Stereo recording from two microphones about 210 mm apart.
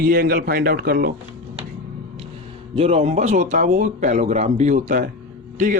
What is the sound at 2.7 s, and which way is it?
A man's voice, 30° right (ahead or behind).